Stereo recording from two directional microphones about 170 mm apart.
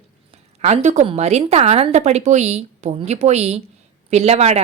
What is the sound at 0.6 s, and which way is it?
A woman's voice, 40° right (ahead or behind).